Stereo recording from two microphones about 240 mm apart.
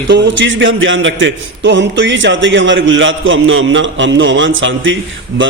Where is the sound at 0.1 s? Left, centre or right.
Right.